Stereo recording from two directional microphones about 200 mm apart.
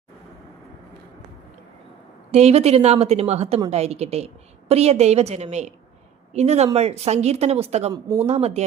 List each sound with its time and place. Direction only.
2.3 s a woman's voice: 30° right (ahead or behind)